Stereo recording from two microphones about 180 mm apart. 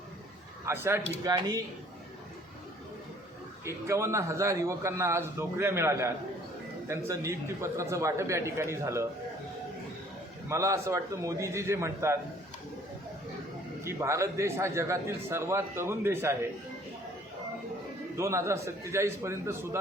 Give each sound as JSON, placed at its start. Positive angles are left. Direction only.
{"t": 0.6, "sound": "a man's voice", "side_deg": -15}
{"t": 3.6, "sound": "a man's voice", "side_deg": -15}
{"t": 10.5, "sound": "a man's voice", "side_deg": -15}
{"t": 13.8, "sound": "a man's voice", "side_deg": -15}
{"t": 18.2, "sound": "a man's voice", "side_deg": -15}